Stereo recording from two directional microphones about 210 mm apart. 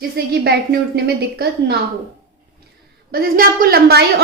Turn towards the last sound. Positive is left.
turn(degrees=-45)  # may be behind; listen again after turning